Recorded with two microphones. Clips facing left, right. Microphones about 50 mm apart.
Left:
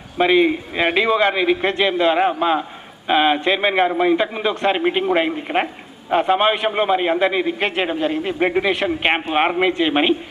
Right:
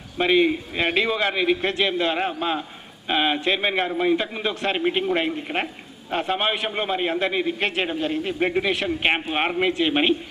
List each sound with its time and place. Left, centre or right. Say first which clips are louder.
0.2 s a man's voice: left 4 dB; centre